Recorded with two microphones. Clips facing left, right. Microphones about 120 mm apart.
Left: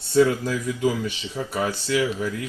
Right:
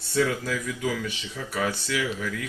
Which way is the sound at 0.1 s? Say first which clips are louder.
Left 6 dB; 30° left (ahead or behind).